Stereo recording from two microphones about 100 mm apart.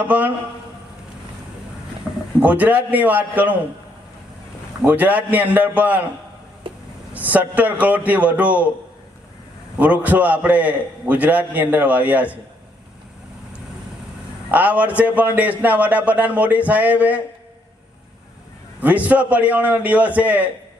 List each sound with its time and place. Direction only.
0.0 s a man's voice: 15° right (ahead or behind)
2.4 s a man's voice: 15° right (ahead or behind)
4.9 s a man's voice: 15° right (ahead or behind)
6.6 s a sound: 60° right (ahead or behind)
7.1 s a man's voice: 15° right (ahead or behind)
9.7 s a man's voice: 15° right (ahead or behind)
14.5 s a man's voice: 15° right (ahead or behind)
18.8 s a man's voice: 15° right (ahead or behind)